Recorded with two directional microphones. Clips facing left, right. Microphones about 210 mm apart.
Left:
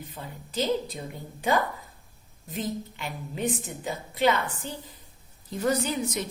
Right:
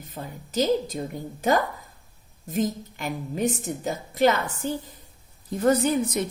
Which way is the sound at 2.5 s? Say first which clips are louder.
Right 6 dB; 45° right (ahead or behind).